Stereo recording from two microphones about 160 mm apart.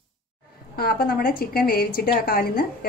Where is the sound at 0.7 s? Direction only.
70° left (ahead or behind).